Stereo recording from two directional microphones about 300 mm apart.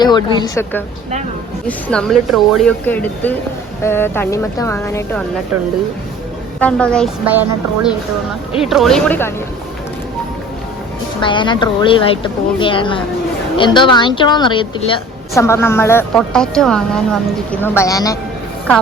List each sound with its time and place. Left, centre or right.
0.0 s a woman's voice: centre
6.6 s speech: centre
8.7 s speech: centre
11.2 s a woman's voice: centre